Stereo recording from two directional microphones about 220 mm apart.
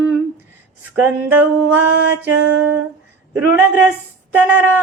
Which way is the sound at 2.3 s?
90° right.